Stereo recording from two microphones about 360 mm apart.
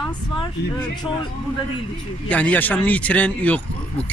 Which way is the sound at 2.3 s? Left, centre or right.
Centre.